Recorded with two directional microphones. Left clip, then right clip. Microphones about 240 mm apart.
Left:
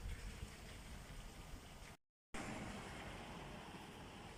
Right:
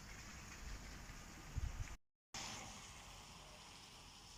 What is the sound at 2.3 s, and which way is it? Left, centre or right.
Vehicle, left.